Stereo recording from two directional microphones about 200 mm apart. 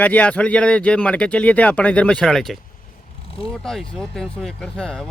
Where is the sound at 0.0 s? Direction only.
5° left (ahead or behind).